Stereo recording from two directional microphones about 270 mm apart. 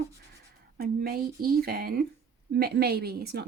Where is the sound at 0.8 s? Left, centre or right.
Right.